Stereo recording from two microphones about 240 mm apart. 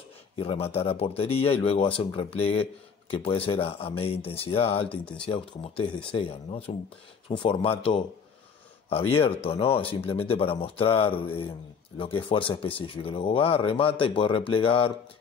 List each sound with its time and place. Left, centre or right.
0.4 s speech: left
4.8 s speech: centre
5.3 s speech: left
9.1 s speech: left